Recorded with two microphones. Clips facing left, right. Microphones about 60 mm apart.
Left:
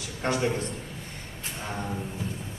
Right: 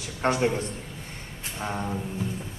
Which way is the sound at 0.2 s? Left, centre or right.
Right.